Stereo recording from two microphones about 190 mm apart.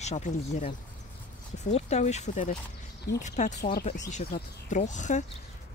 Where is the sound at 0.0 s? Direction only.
40° left (ahead or behind).